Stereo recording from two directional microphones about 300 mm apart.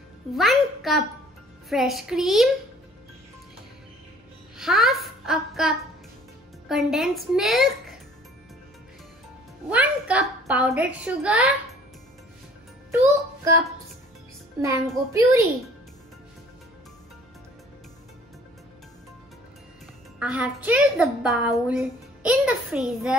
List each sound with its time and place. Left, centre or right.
0.3 s a child's voice: centre
4.6 s a woman's voice: centre
9.7 s a woman's voice: centre
13.0 s a child's voice: centre
20.2 s a woman's voice: centre